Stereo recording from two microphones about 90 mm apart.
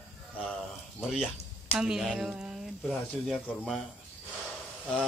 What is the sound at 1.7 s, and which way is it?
Speech, 5° right (ahead or behind).